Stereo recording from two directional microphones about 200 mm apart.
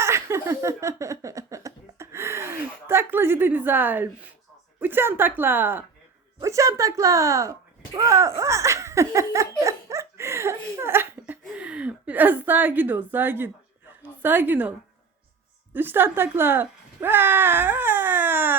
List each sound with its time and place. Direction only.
0.0 s a sound: 15° right (ahead or behind)
4.8 s a woman's voice: 10° right (ahead or behind)
8.4 s laughter: 15° right (ahead or behind)
14.2 s a woman's voice: 10° right (ahead or behind)
15.7 s speech: 10° right (ahead or behind)